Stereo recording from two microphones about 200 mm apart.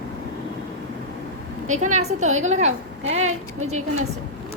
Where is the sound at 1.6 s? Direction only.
40° right (ahead or behind).